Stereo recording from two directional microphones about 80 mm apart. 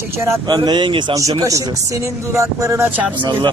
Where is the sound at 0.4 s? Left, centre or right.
Right.